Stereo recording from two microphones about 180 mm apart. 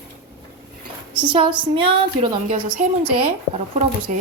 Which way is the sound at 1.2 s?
30° right (ahead or behind).